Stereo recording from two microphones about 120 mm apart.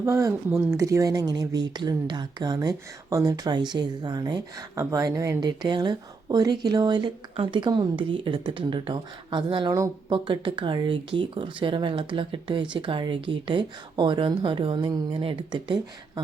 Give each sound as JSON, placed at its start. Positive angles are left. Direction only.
{"t": 0.0, "sound": "speech", "side_deg": -25}